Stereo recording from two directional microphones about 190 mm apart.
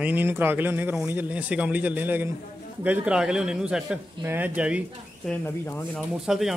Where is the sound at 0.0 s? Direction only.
10° right (ahead or behind).